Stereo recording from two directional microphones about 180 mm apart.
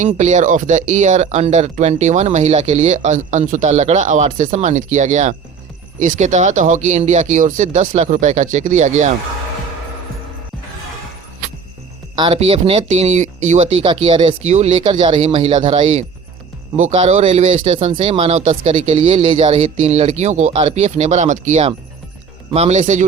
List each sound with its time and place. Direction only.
0.2 s speech: 40° right (ahead or behind)
12.1 s speech: 30° right (ahead or behind)